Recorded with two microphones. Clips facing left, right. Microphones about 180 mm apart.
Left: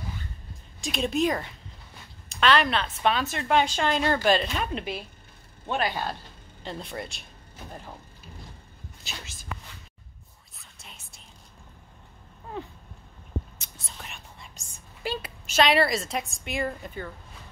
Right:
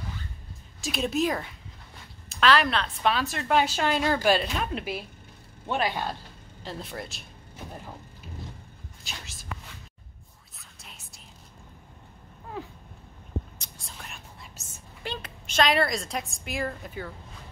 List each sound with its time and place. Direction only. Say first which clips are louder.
0.7 s a woman's voice: left 1 dB; 5° right (ahead or behind)
9.0 s whispering: left 1 dB; centre (ahead or behind)
10.8 s whispering: left 1 dB; centre (ahead or behind)
12.6 s cat: left 1 dB; 5° right (ahead or behind)
13.6 s whispering: even; 5° left (ahead or behind)
15.0 s a woman's voice: left 4 dB; 5° left (ahead or behind)